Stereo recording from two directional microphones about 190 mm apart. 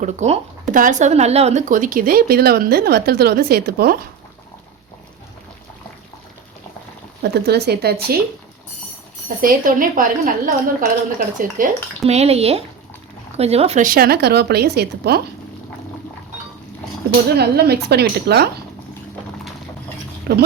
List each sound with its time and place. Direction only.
0.0 s speech: 40° right (ahead or behind); by 3.9 s 55° right (ahead or behind)
7.2 s a woman's voice: 60° right (ahead or behind)
9.4 s speech: 45° right (ahead or behind)
17.3 s a woman's voice: 55° right (ahead or behind)
20.3 s speech: 60° right (ahead or behind)